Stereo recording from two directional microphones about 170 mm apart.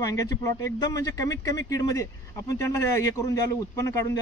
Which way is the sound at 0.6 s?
20° left (ahead or behind).